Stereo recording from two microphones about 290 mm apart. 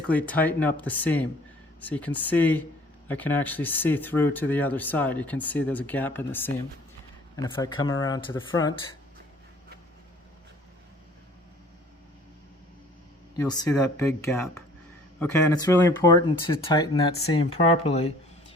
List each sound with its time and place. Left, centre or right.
0.1 s speech: centre
13.3 s speech: centre